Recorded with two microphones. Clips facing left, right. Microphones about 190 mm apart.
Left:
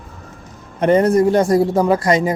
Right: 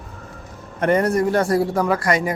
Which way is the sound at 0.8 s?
20° left (ahead or behind).